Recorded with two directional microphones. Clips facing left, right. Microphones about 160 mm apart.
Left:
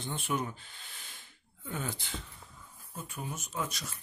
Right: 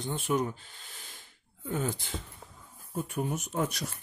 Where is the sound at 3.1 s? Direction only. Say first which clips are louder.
Right 6 dB; 55° right (ahead or behind).